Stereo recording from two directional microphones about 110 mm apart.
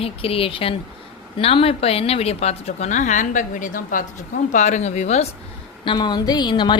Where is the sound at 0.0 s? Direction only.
60° left (ahead or behind); by 3.1 s 85° left.